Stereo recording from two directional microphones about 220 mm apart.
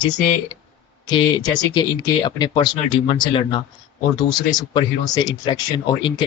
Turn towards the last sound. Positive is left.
turn(degrees=20)  # may be behind; listen again after turning